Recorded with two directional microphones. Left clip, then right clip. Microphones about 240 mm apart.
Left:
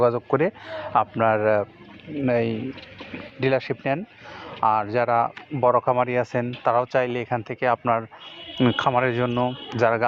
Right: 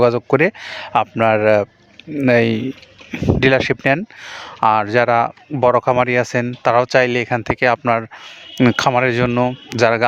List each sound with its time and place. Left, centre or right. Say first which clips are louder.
0.0 s speech: right 6 dB; right